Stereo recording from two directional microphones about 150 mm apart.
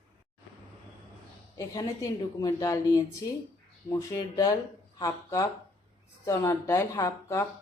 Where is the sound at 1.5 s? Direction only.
25° left (ahead or behind).